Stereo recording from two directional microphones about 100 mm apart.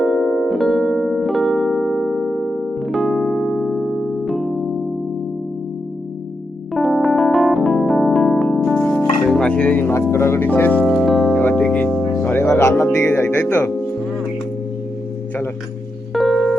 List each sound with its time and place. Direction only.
0.0 s music: centre (ahead or behind)
6.7 s electric piano: centre (ahead or behind)
9.2 s music: 10° left (ahead or behind); by 10.5 s 25° left (ahead or behind)
10.5 s speech: 15° left (ahead or behind)
10.8 s music: centre (ahead or behind)
11.3 s music: 15° left (ahead or behind)
11.9 s music: 5° right (ahead or behind)
12.2 s music: 15° left (ahead or behind)
16.1 s music: centre (ahead or behind)